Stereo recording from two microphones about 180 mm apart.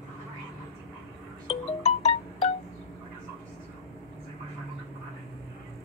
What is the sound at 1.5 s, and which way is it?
Music, 35° left (ahead or behind).